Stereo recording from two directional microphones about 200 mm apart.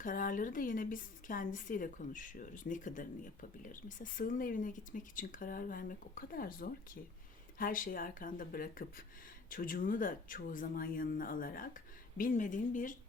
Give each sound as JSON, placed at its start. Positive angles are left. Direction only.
{"t": 0.0, "sound": "speech", "side_deg": 40}